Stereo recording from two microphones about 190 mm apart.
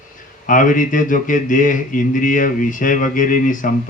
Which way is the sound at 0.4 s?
45° left (ahead or behind).